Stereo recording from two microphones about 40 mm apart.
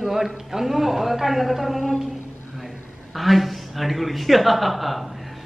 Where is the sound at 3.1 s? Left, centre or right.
Centre.